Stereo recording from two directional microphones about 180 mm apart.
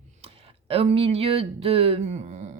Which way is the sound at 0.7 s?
30° right (ahead or behind).